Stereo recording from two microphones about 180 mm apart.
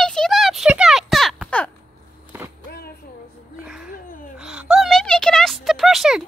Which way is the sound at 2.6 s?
60° left (ahead or behind).